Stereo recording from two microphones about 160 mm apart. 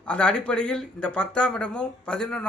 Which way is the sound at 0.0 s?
5° left (ahead or behind).